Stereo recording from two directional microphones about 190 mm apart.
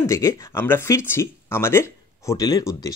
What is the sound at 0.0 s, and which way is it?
Speech, 15° left (ahead or behind).